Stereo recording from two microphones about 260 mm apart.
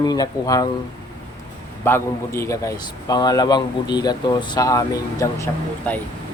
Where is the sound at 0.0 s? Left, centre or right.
Centre.